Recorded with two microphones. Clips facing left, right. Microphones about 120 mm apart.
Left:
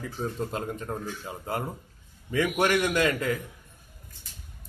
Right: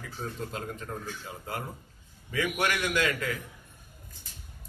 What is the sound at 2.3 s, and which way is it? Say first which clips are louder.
Speech: left 5 dB; 30° left (ahead or behind).